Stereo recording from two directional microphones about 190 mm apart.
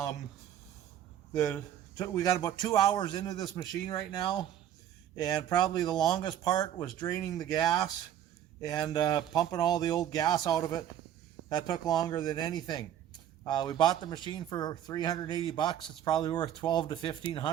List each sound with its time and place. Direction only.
2.0 s a man's voice: 20° left (ahead or behind)